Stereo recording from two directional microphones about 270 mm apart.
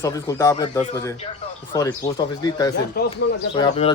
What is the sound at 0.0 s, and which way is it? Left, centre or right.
Speech, centre.